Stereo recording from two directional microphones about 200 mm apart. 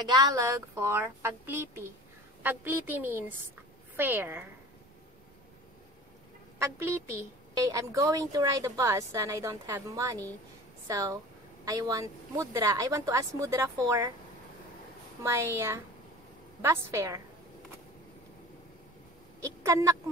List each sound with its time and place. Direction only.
0.0 s a woman's voice: 15° right (ahead or behind)
6.6 s a woman's voice: 15° right (ahead or behind)
15.2 s a woman's voice: 15° right (ahead or behind)
19.4 s speech: 15° right (ahead or behind)